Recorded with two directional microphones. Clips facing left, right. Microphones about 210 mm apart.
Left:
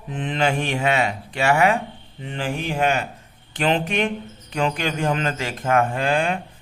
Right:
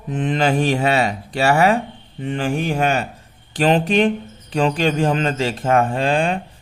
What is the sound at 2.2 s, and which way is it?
A man's voice, 50° right (ahead or behind).